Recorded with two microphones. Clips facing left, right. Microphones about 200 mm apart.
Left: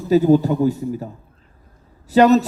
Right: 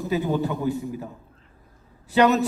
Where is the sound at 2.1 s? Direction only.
40° left (ahead or behind).